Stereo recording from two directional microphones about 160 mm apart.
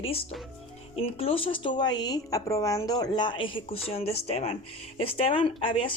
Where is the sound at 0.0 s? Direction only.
35° left (ahead or behind).